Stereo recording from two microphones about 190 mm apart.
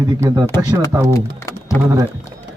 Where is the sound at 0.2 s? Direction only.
15° right (ahead or behind).